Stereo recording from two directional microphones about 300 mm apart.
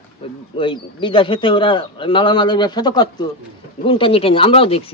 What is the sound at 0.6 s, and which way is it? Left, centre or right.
A man's voice, centre.